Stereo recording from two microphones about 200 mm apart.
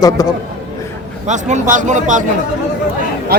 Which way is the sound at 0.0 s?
20° left (ahead or behind).